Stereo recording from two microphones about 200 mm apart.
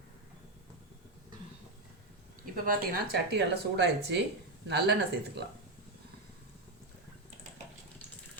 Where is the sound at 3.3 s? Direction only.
55° right (ahead or behind).